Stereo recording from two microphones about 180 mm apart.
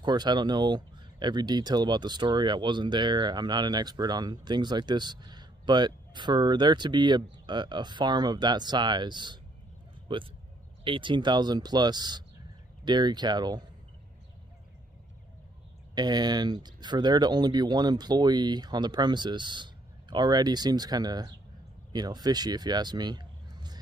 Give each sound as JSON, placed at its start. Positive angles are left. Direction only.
{"t": 0.0, "sound": "speech", "side_deg": -25}
{"t": 15.9, "sound": "speech", "side_deg": -25}